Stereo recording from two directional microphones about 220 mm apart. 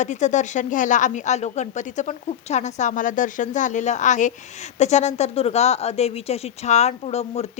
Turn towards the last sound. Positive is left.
turn(degrees=30)  # may be behind; listen again after turning